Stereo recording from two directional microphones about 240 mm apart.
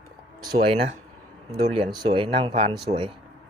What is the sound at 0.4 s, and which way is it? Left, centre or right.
Speech, centre.